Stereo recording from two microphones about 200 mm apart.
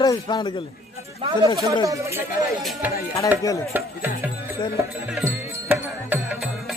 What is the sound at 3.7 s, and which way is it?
Music, 10° right (ahead or behind).